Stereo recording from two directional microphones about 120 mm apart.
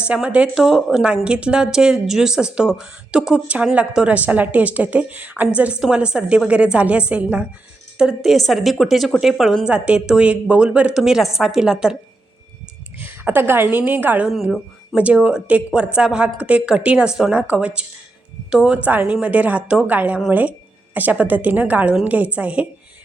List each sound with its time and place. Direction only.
0.0 s speech: 10° right (ahead or behind)
13.0 s speech: 15° right (ahead or behind)